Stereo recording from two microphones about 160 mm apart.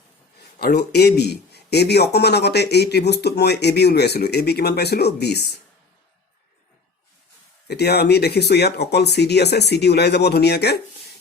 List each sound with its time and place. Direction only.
0.6 s a man's voice: 85° left
7.7 s a man's voice: 90° left